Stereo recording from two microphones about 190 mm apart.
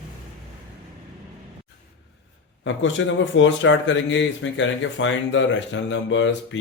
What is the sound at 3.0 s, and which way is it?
Speech, 85° left.